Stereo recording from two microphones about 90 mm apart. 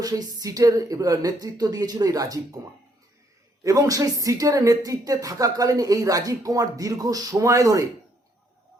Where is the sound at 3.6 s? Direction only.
40° right (ahead or behind).